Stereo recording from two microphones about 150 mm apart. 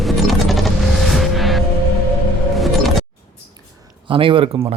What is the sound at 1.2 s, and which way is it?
Music, centre (ahead or behind).